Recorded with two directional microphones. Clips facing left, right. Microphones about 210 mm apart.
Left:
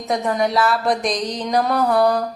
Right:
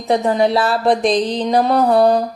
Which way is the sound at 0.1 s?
30° right (ahead or behind).